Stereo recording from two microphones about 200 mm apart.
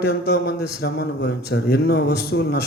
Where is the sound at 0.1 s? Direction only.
50° left (ahead or behind).